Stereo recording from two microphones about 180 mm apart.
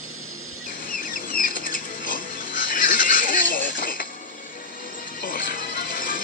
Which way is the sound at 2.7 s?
50° left (ahead or behind).